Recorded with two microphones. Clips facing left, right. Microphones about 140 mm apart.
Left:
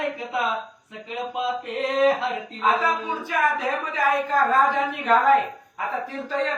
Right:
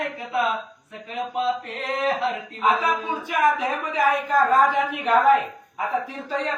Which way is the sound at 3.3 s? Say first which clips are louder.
Right 2 dB; 15° right (ahead or behind).